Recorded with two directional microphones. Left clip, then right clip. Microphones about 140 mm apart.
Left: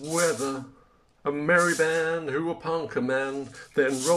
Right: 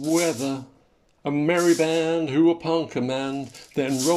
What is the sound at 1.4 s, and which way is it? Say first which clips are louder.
Speech: right 1 dB; 25° right (ahead or behind).